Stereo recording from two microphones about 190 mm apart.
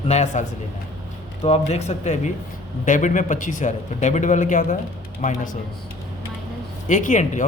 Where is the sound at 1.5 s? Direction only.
35° left (ahead or behind).